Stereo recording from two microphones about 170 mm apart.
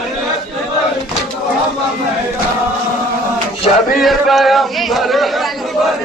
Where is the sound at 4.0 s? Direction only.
Centre (ahead or behind).